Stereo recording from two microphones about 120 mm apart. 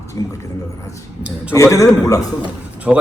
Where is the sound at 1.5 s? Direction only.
25° left (ahead or behind).